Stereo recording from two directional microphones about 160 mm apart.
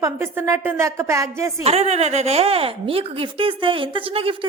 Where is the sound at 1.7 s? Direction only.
40° right (ahead or behind).